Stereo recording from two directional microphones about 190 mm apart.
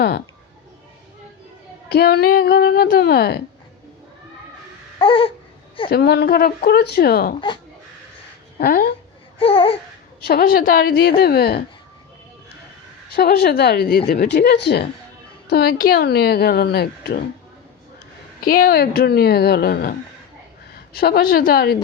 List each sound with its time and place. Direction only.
1.9 s speech: 60° left (ahead or behind)
4.9 s babbling: 30° left (ahead or behind)
5.9 s speech: 60° left (ahead or behind)
7.3 s babbling: 25° left (ahead or behind)
8.5 s a woman's voice: 55° left (ahead or behind)
9.4 s babbling: 30° left (ahead or behind)
10.2 s speech: 50° left (ahead or behind)
13.1 s speech: 55° left (ahead or behind)
18.4 s a woman's voice: 50° left (ahead or behind)